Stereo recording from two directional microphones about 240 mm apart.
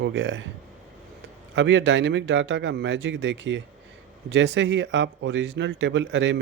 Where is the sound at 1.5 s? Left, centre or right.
Right.